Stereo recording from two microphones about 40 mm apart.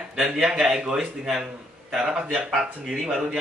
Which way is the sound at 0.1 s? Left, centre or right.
Centre.